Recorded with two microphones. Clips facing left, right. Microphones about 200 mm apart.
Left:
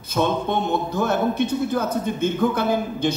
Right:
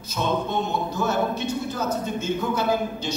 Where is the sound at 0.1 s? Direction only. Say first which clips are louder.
Left 4 dB; 55° left (ahead or behind).